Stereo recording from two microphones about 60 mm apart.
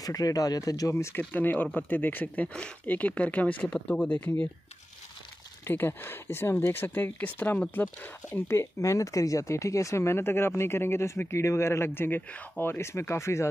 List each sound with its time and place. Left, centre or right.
0.0 s speech: left
0.9 s speech: left
1.3 s speech: left
5.7 s speech: left
8.3 s speech: left
8.9 s speech: left
12.7 s speech: left